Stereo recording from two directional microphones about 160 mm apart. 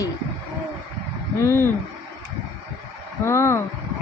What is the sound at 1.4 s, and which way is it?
Speech, 15° left (ahead or behind).